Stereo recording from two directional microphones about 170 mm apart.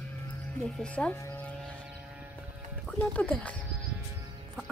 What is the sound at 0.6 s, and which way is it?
Speech, 5° left (ahead or behind).